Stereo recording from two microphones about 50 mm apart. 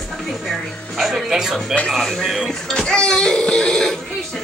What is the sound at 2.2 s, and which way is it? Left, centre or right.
Speech, centre.